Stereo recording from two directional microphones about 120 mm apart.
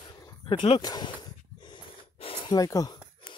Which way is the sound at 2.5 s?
30° left (ahead or behind).